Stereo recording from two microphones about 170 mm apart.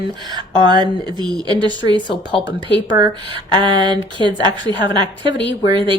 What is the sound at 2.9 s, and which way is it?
Speech, 20° right (ahead or behind).